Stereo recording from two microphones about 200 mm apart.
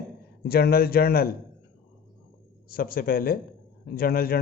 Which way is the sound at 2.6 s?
45° left (ahead or behind).